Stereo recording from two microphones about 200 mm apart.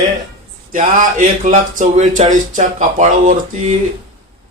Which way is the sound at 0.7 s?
40° right (ahead or behind).